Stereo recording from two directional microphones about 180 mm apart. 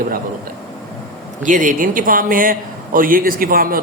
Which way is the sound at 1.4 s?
45° right (ahead or behind).